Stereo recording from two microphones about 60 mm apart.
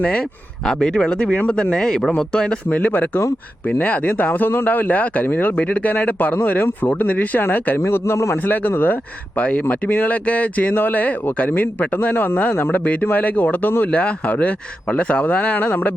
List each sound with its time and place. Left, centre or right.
0.0 s speech: centre; by 7.8 s left
7.8 s a man's voice: left
8.4 s speech: left
9.4 s speech: left